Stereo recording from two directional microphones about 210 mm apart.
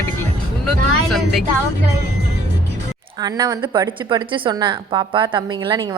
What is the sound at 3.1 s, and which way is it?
A woman's voice, 20° right (ahead or behind).